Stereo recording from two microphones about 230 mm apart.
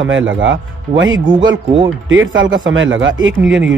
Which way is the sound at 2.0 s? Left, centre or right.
Right.